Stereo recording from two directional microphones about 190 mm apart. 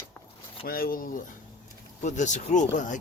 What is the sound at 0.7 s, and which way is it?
Speech, 50° left (ahead or behind).